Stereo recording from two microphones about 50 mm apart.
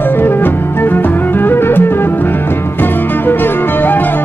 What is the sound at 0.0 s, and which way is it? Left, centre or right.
Music, left.